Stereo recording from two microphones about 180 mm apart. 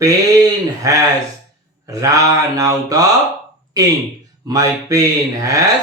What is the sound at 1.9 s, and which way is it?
Mantra, 20° right (ahead or behind).